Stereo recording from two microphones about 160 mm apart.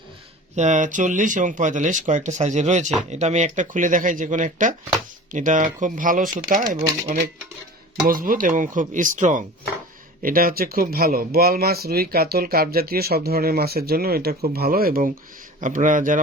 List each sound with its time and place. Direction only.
0.5 s speech: 50° right (ahead or behind)
6.7 s speech: 20° right (ahead or behind)
8.0 s speech: 60° right (ahead or behind)
10.2 s speech: 65° right (ahead or behind)
15.6 s speech: 55° right (ahead or behind)